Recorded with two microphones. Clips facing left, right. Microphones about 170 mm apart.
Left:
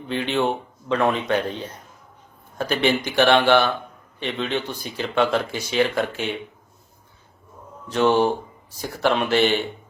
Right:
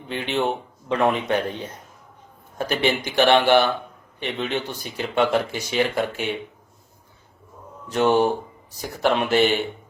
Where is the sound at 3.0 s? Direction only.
15° right (ahead or behind).